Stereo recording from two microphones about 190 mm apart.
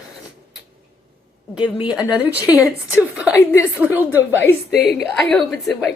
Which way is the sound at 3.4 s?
15° left (ahead or behind).